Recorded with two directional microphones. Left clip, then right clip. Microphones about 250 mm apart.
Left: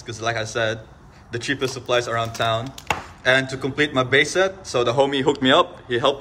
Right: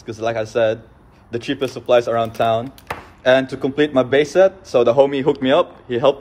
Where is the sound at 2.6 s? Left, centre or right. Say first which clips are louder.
Right 1 dB; centre.